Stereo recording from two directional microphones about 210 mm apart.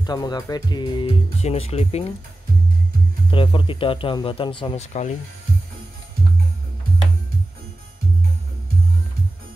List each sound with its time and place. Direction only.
0.0 s speech: 20° left (ahead or behind)
3.3 s speech: 25° left (ahead or behind)